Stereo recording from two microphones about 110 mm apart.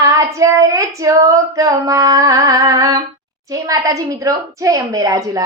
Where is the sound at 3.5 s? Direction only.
30° right (ahead or behind).